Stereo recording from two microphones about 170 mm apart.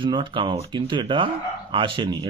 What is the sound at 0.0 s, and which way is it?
Speech, 30° right (ahead or behind).